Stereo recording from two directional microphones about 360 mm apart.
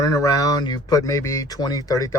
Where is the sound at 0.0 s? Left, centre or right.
Centre.